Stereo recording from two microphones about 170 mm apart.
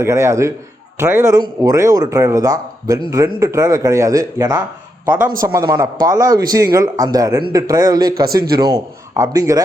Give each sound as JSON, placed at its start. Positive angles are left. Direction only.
{"t": 0.0, "sound": "a man's voice", "side_deg": -15}